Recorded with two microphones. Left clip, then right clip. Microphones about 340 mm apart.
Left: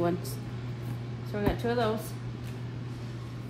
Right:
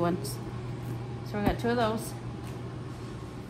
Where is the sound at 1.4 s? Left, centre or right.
Centre.